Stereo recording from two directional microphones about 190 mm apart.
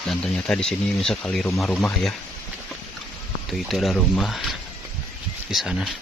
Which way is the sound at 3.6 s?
Centre (ahead or behind).